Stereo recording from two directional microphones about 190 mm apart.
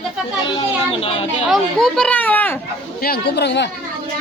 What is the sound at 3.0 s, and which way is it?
Speech, 55° left (ahead or behind).